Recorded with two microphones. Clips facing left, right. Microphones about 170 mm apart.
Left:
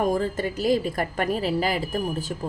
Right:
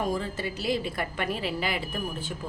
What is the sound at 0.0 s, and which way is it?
A woman's voice, 50° left (ahead or behind).